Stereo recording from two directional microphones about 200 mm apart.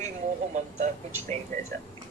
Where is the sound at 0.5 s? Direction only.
40° right (ahead or behind).